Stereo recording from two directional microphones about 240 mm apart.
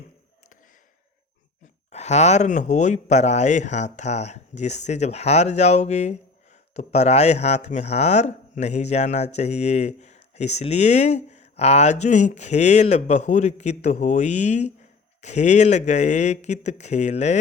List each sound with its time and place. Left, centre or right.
1.9 s speech: left